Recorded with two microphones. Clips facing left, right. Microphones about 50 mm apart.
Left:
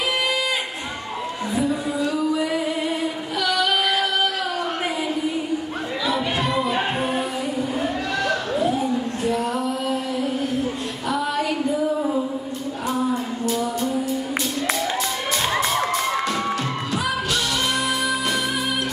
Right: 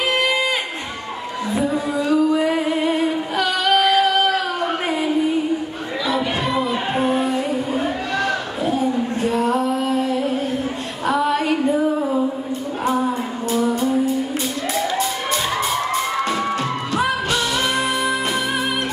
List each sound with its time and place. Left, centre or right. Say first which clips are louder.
1.5 s music: right 3 dB; right
6.0 s chatter: right 2 dB; centre
7.7 s a sound: right 2 dB; centre
9.2 s female singing: right 6 dB; right
11.1 s a sound: right 5 dB; right
15.9 s crowd: right 2 dB; centre
17.3 s music: right 3 dB; right